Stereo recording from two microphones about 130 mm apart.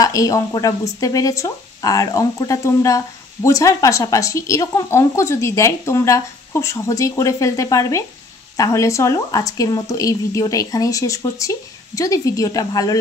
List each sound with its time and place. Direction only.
0.0 s speech: 25° left (ahead or behind)